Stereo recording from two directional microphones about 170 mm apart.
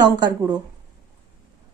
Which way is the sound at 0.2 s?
25° right (ahead or behind).